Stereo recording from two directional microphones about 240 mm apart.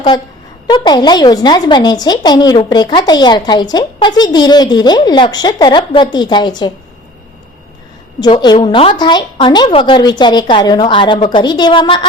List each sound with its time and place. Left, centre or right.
0.1 s a woman's voice: centre
8.2 s a woman's voice: centre